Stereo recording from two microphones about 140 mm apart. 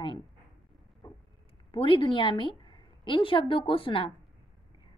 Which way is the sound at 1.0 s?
35° left (ahead or behind).